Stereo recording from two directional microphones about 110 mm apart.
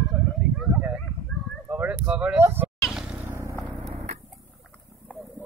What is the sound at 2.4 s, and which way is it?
Vehicle, 20° right (ahead or behind).